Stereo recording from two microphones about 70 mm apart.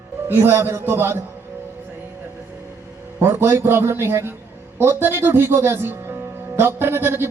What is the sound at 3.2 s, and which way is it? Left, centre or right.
A man's voice, right.